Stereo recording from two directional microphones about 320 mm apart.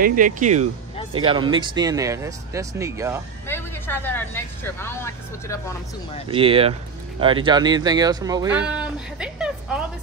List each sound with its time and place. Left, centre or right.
0.0 s speech: right; by 3.2 s centre
3.4 s speech: centre
6.2 s speech: centre